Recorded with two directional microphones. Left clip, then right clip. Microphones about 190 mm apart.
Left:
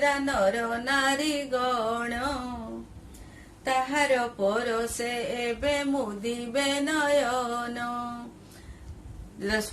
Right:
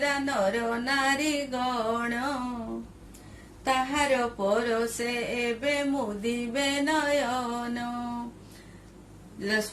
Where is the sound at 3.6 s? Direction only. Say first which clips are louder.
Left 1 dB; 15° left (ahead or behind).